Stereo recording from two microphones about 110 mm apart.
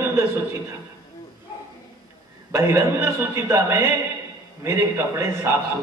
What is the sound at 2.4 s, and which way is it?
A man's voice, 25° right (ahead or behind).